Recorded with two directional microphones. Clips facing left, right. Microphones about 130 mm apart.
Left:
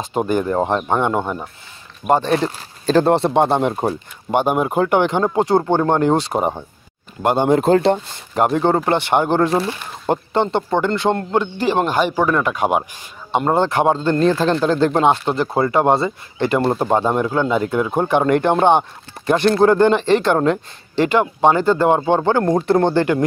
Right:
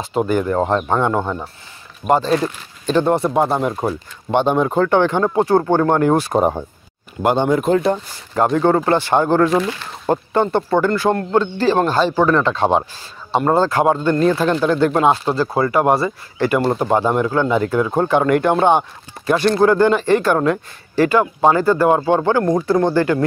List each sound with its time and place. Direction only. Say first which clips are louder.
0.0 s speech: right 1 dB; 15° left (ahead or behind)
4.3 s speech: right 1 dB; 10° left (ahead or behind); by 6.3 s 25° left (ahead or behind)
7.4 s speech: left 6 dB; 25° left (ahead or behind)
9.5 s speech: right 1 dB; 30° left (ahead or behind)
9.8 s speech: right 1 dB; 20° left (ahead or behind)